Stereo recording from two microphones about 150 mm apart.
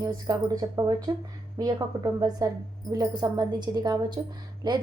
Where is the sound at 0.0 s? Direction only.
25° right (ahead or behind).